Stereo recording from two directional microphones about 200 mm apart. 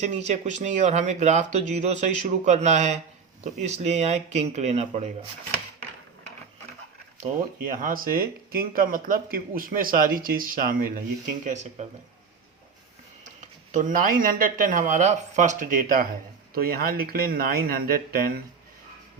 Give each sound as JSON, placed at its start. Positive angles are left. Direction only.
{"t": 0.0, "sound": "speech", "side_deg": -35}
{"t": 7.2, "sound": "speech", "side_deg": -40}
{"t": 13.7, "sound": "speech", "side_deg": -40}